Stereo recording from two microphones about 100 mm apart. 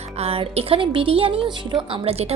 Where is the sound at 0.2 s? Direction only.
80° right; by 1.5 s 65° right (ahead or behind).